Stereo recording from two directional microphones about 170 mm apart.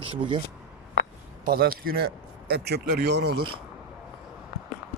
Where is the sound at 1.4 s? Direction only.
60° right (ahead or behind).